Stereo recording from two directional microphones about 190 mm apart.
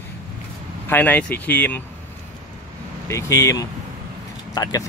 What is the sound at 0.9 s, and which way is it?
Speech, 10° left (ahead or behind).